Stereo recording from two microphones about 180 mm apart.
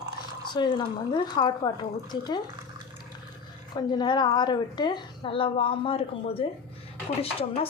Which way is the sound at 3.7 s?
25° left (ahead or behind).